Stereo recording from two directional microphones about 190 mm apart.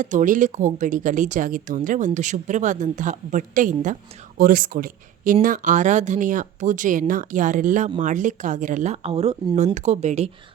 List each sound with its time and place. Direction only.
0.0 s speech: 40° right (ahead or behind); by 9.7 s 25° right (ahead or behind)
9.7 s speech: 35° right (ahead or behind)